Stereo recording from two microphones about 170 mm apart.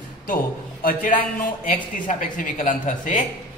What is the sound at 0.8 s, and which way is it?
A man's voice, 55° left (ahead or behind).